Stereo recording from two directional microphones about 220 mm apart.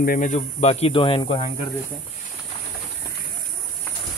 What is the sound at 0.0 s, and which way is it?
Speech, 35° left (ahead or behind).